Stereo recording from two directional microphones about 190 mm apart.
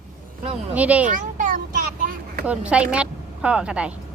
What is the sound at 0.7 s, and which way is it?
Speech, 5° right (ahead or behind).